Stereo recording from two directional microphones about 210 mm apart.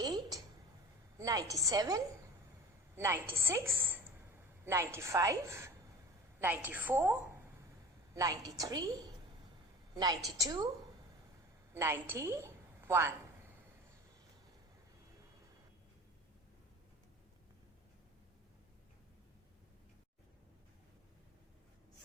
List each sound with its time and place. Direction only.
0.0 s a sound: 20° right (ahead or behind)
1.2 s a woman's voice: 15° right (ahead or behind)
11.7 s a woman's voice: 10° right (ahead or behind)